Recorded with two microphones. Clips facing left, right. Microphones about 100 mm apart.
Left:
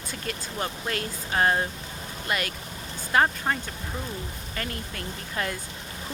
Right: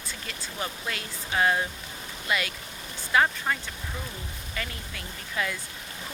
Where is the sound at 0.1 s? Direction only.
45° left (ahead or behind).